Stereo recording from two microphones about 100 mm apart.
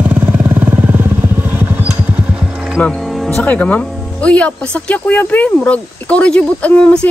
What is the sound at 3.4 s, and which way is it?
Speech, 15° left (ahead or behind).